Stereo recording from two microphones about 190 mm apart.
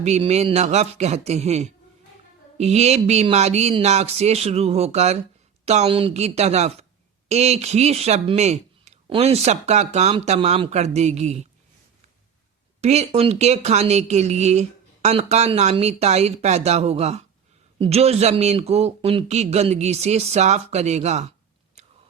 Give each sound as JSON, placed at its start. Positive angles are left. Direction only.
{"t": 0.0, "sound": "speech", "side_deg": -35}
{"t": 12.8, "sound": "speech", "side_deg": -35}
{"t": 21.8, "sound": "biting", "side_deg": -35}